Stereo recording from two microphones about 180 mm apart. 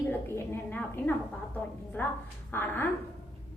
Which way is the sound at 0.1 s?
10° left (ahead or behind).